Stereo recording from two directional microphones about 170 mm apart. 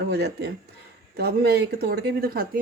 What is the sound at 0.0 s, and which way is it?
Speech, 70° right (ahead or behind).